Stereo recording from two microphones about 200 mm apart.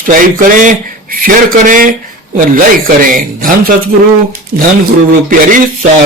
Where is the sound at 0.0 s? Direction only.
45° right (ahead or behind).